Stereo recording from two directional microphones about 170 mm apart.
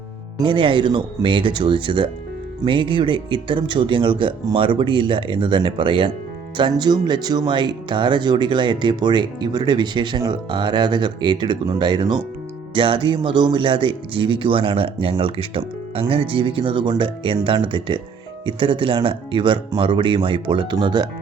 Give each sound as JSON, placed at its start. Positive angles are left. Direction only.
{"t": 0.3, "sound": "speech", "side_deg": -30}